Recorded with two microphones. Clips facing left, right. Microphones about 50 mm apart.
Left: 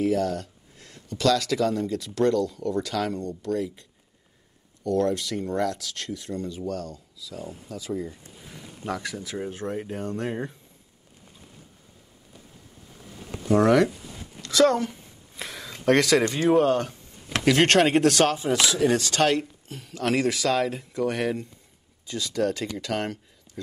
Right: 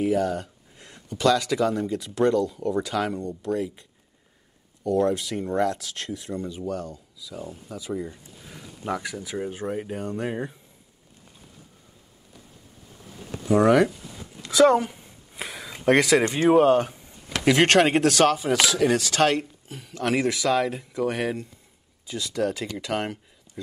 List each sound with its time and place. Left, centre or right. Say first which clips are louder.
0.0 s speech: right 1 dB; centre
4.9 s speech: right 1 dB; centre
13.5 s speech: right 1 dB; centre
14.4 s a sound: right 3 dB; centre
16.3 s speech: right 3 dB; right
17.5 s speech: right 1 dB; centre